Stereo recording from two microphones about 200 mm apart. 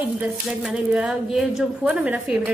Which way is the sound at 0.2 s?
5° right (ahead or behind).